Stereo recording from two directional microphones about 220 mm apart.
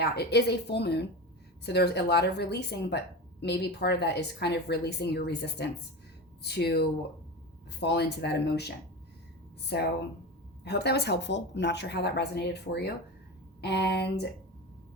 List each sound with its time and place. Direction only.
0.0 s speech: 50° left (ahead or behind)
9.7 s speech: 50° left (ahead or behind)